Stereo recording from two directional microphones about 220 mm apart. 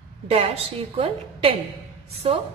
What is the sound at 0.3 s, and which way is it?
A woman's voice, 25° right (ahead or behind).